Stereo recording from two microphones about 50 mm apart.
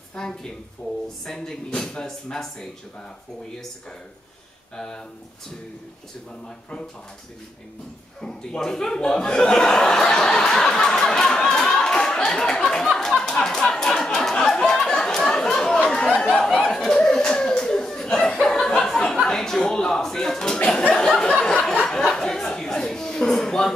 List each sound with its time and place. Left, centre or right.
0.1 s speech: centre
4.7 s speech: centre
8.2 s speech: centre
12.8 s a sound: centre
21.8 s chuckle: centre